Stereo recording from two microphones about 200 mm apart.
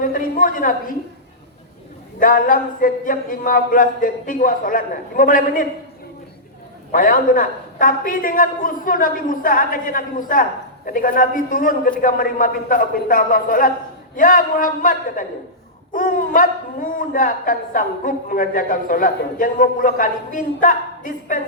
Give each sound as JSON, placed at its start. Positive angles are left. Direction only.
{"t": 0.0, "sound": "a sound", "side_deg": 45}
{"t": 2.1, "sound": "speech", "side_deg": 45}
{"t": 6.9, "sound": "speech", "side_deg": 45}